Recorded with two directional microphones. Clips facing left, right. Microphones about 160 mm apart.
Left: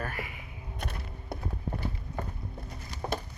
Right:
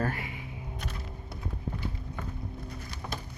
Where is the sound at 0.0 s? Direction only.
30° right (ahead or behind).